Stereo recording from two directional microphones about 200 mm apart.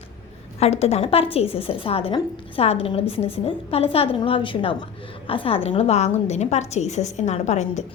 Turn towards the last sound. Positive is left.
turn(degrees=35)  # may be behind; listen again after turning